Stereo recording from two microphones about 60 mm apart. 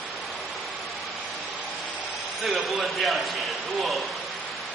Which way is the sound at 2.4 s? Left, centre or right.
Centre.